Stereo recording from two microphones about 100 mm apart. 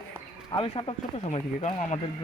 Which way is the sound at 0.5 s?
65° left (ahead or behind).